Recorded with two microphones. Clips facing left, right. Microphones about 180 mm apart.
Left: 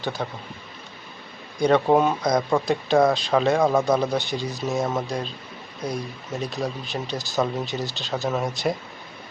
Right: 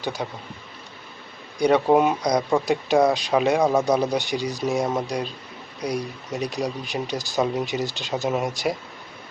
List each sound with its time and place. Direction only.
0.0 s speech: 15° right (ahead or behind)
1.5 s speech: 10° right (ahead or behind)